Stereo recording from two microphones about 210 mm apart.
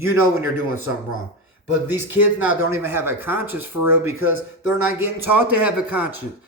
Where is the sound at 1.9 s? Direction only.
10° right (ahead or behind).